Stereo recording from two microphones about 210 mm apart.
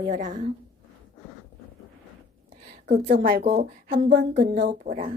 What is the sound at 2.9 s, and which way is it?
Speech, 40° right (ahead or behind).